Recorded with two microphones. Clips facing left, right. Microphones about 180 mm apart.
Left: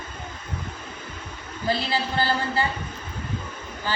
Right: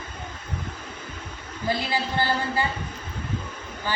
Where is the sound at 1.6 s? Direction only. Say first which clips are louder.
Left 1 dB; 15° right (ahead or behind).